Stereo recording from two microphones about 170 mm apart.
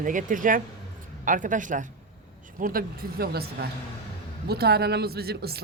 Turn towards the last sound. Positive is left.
turn(degrees=-70)  # may be behind; listen again after turning